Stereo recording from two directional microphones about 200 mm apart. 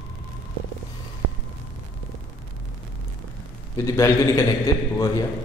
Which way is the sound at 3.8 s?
15° left (ahead or behind).